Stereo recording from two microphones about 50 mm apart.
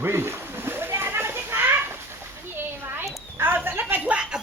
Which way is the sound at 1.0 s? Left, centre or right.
Right.